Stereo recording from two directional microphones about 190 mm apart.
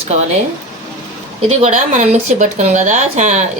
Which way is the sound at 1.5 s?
35° right (ahead or behind).